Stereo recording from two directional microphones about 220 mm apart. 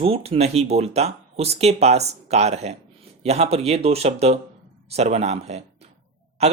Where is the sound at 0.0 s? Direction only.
25° right (ahead or behind).